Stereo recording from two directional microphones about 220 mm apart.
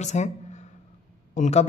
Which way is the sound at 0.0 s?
30° left (ahead or behind).